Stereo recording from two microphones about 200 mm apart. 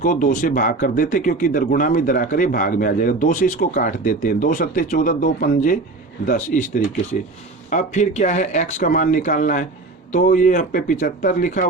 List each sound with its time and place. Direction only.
0.0 s speech: 40° left (ahead or behind)